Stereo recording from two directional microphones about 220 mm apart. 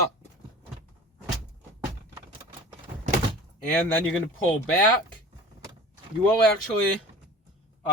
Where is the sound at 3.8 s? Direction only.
5° left (ahead or behind).